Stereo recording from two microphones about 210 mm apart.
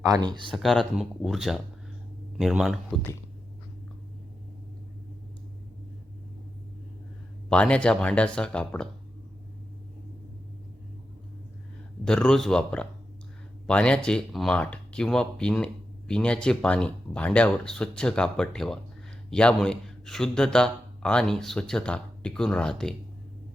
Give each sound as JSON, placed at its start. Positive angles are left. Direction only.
{"t": 0.0, "sound": "speech", "side_deg": -15}
{"t": 0.5, "sound": "speech", "side_deg": 0}
{"t": 7.5, "sound": "speech", "side_deg": 5}
{"t": 12.0, "sound": "speech", "side_deg": 5}